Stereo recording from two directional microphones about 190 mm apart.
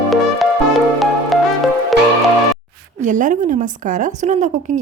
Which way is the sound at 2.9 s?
40° right (ahead or behind).